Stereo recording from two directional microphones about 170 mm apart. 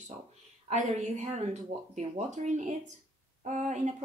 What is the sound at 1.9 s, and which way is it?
Speech, 40° right (ahead or behind).